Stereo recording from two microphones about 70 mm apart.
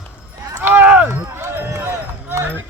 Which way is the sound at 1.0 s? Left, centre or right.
Right.